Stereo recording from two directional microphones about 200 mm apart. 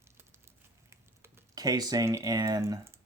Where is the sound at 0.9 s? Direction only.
15° right (ahead or behind).